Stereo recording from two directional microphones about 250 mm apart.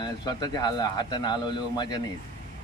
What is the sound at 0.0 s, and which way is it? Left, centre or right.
Speech, centre.